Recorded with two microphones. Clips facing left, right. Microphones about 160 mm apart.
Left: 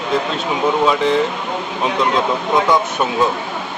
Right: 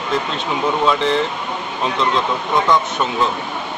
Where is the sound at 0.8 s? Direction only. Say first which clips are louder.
Left 2 dB; 10° left (ahead or behind).